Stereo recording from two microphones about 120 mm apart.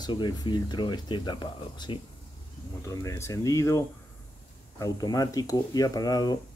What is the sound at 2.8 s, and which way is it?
Speech, 25° left (ahead or behind).